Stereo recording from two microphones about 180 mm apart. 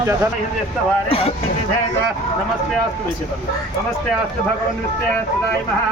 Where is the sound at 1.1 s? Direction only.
30° left (ahead or behind).